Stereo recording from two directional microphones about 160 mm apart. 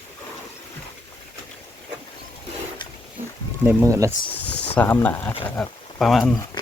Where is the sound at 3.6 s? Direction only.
20° right (ahead or behind).